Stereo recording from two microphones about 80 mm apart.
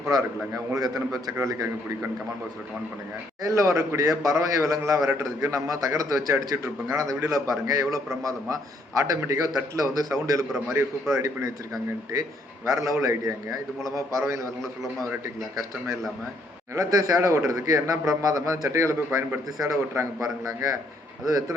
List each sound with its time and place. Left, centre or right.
0.1 s a man's voice: right
3.4 s a man's voice: right
16.7 s a man's voice: right